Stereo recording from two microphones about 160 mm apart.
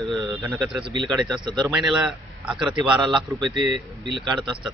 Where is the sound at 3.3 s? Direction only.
20° right (ahead or behind).